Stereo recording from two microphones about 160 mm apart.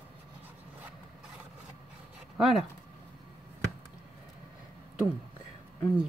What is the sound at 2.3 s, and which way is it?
Speech, centre (ahead or behind).